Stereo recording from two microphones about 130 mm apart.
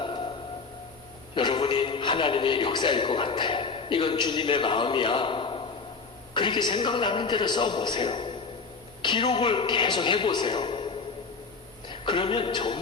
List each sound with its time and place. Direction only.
0.0 s music: 40° left (ahead or behind)
1.4 s a man's voice: 35° left (ahead or behind)